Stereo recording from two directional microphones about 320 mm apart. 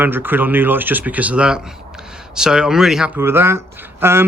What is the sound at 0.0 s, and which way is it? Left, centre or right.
Speech, centre.